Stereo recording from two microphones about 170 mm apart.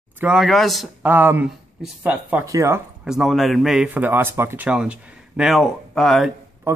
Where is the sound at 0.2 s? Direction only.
5° right (ahead or behind).